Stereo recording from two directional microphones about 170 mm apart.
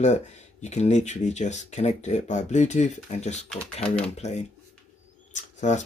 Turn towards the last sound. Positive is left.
turn(degrees=45)  # may be behind; listen again after turning